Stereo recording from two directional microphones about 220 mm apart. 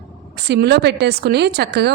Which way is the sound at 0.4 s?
50° right (ahead or behind).